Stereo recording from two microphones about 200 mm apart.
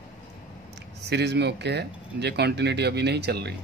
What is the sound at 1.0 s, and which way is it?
Speech, 55° right (ahead or behind).